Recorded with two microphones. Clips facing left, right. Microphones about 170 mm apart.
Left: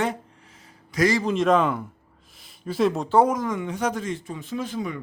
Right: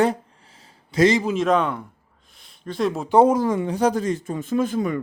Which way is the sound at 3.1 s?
25° right (ahead or behind).